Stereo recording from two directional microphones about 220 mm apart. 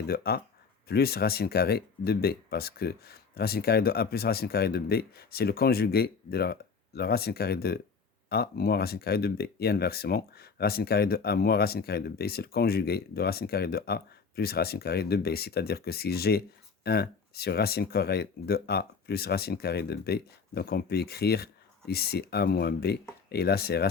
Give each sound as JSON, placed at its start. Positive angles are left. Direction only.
{"t": 0.1, "sound": "speech", "side_deg": 45}